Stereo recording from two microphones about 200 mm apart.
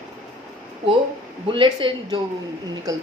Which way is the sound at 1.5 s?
25° right (ahead or behind).